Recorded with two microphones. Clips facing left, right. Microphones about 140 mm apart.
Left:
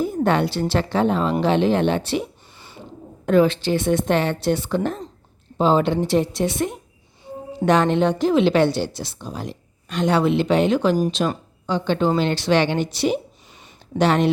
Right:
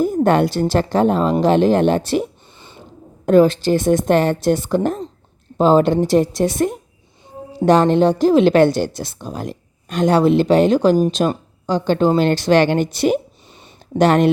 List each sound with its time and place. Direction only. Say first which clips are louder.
0.0 s a woman's voice: right 5 dB; 45° right (ahead or behind)
3.2 s a woman's voice: right 4 dB; 40° right (ahead or behind)